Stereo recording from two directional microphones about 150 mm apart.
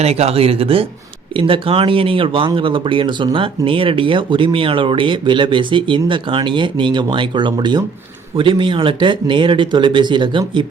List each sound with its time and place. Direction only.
0.0 s speech: 45° right (ahead or behind)